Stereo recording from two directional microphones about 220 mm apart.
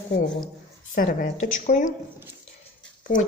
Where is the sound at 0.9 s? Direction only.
35° left (ahead or behind).